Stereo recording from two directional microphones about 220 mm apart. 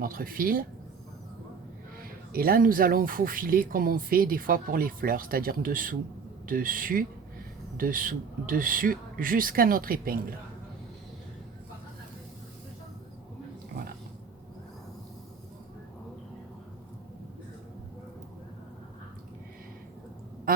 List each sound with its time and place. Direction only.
0.0 s speech: 40° right (ahead or behind)
2.0 s speech: 40° right (ahead or behind)